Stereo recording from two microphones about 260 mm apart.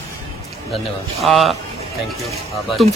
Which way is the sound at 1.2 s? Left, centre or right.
Centre.